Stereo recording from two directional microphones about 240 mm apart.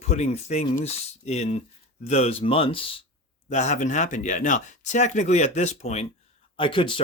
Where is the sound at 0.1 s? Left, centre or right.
Left.